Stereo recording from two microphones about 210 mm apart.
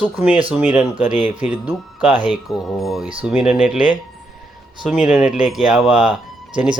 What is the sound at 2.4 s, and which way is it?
Speech, centre (ahead or behind).